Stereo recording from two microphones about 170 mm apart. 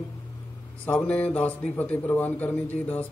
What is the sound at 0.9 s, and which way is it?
A man's voice, 10° left (ahead or behind).